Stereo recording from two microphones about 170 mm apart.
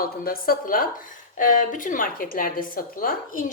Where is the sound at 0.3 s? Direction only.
55° left (ahead or behind).